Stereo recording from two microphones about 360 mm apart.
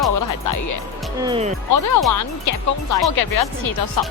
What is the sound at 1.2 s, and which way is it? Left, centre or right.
Speech, centre.